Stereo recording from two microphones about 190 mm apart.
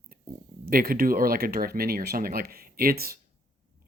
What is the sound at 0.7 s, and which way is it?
Speech, 50° right (ahead or behind).